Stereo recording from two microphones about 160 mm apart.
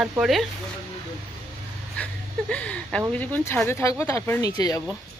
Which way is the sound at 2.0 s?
10° left (ahead or behind).